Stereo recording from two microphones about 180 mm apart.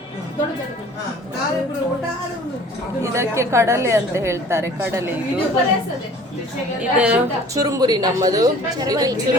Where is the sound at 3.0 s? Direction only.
15° right (ahead or behind).